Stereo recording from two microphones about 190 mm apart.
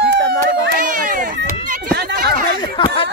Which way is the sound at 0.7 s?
50° right (ahead or behind).